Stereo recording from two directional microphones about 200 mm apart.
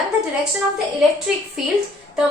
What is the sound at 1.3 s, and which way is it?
Speech, 5° right (ahead or behind).